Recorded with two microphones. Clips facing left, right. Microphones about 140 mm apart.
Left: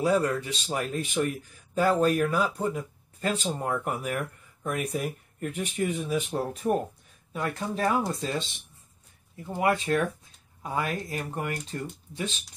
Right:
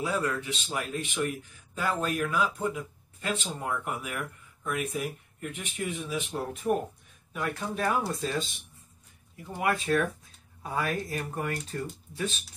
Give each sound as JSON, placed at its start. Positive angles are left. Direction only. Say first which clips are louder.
{"t": 0.0, "sound": "speech", "louder": "left 5 dB", "side_deg": 40}
{"t": 9.5, "sound": "speech", "louder": "left 2 dB", "side_deg": 30}